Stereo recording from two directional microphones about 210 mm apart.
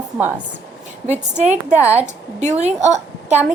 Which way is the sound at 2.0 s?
35° right (ahead or behind).